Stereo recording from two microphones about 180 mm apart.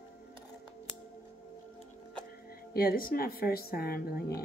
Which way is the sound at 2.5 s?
55° left (ahead or behind).